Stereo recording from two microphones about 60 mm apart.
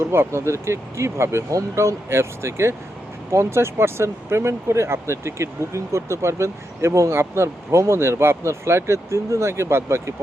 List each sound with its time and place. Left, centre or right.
0.0 s speech: right